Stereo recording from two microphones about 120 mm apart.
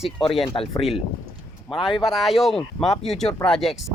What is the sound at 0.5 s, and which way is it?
Speech, 30° left (ahead or behind).